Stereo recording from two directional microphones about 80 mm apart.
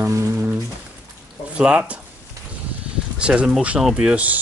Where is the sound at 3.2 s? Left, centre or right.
Centre.